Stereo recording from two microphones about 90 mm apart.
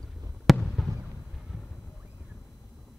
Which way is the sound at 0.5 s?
Centre (ahead or behind).